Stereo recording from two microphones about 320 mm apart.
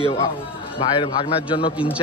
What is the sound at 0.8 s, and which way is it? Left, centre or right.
Speech, centre.